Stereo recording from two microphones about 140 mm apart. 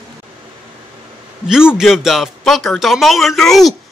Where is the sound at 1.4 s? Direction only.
5° right (ahead or behind).